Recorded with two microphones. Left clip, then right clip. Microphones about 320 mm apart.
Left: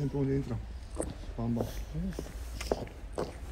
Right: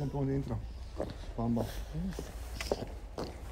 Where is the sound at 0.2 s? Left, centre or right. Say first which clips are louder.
Left 3 dB; right.